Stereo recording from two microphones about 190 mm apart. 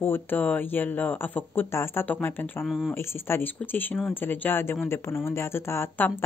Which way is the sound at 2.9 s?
15° left (ahead or behind).